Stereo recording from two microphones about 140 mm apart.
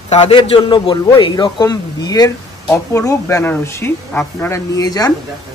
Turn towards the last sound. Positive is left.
turn(degrees=25)  # may be behind; listen again after turning